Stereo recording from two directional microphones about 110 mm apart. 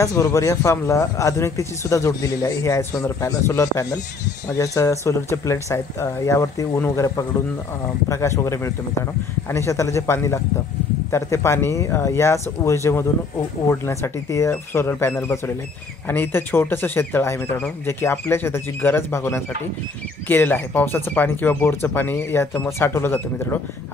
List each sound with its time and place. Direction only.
0.0 s speech: 25° left (ahead or behind)